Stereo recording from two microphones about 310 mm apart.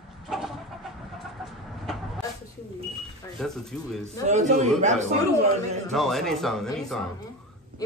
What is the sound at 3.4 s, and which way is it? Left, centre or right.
Speech, centre.